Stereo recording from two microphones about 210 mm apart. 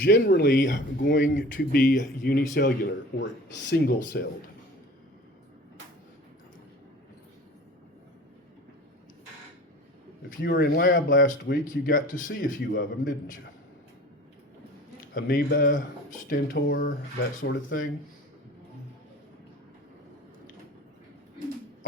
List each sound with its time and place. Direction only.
0.1 s speech: 50° left (ahead or behind)
10.2 s speech: 45° left (ahead or behind)
15.1 s speech: 45° left (ahead or behind)